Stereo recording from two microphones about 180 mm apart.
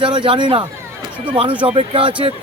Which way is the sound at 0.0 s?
25° right (ahead or behind).